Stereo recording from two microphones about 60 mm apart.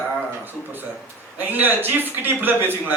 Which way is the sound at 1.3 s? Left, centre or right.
Right.